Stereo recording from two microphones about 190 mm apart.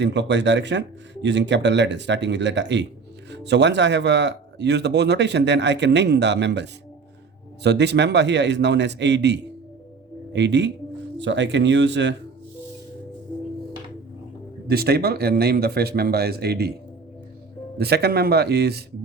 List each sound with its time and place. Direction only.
0.0 s speech: 65° right (ahead or behind)
14.7 s speech: 55° right (ahead or behind)
17.7 s speech: 55° right (ahead or behind)